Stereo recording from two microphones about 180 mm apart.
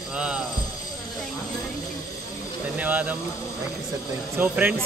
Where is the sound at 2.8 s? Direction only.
10° right (ahead or behind).